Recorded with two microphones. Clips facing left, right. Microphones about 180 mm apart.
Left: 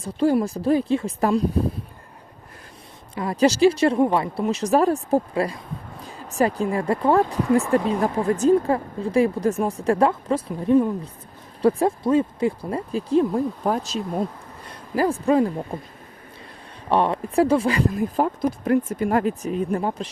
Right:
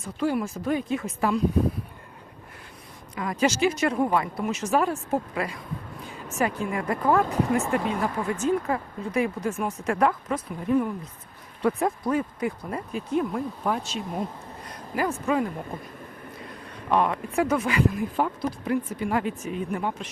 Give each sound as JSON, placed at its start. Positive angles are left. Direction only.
{"t": 0.0, "sound": "speech", "side_deg": 35}
{"t": 3.2, "sound": "speech", "side_deg": 35}
{"t": 16.9, "sound": "speech", "side_deg": 30}
{"t": 18.6, "sound": "speech", "side_deg": 45}